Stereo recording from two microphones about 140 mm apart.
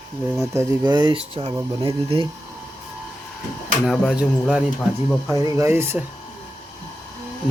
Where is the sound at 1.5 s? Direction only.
25° right (ahead or behind).